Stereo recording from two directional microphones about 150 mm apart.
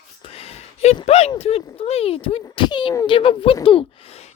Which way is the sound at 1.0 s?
45° left (ahead or behind).